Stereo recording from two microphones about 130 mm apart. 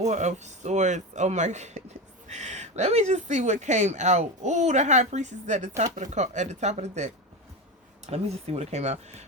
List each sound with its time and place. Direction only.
0.0 s speech: 65° right (ahead or behind)